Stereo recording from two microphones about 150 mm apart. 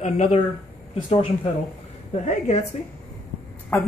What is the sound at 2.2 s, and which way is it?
Speech, 45° left (ahead or behind).